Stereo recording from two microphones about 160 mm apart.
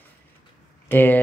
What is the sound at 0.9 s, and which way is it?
Speech, 15° left (ahead or behind).